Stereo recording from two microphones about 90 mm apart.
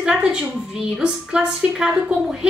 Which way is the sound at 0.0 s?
10° right (ahead or behind).